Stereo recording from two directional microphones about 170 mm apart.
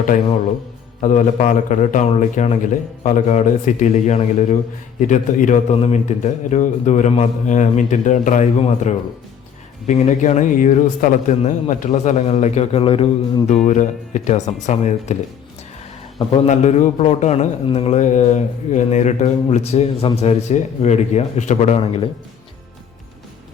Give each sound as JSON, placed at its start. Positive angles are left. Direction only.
{"t": 1.0, "sound": "speech", "side_deg": 45}
{"t": 13.7, "sound": "speech", "side_deg": 45}